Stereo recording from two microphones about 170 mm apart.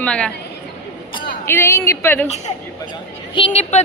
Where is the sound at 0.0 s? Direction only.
5° left (ahead or behind).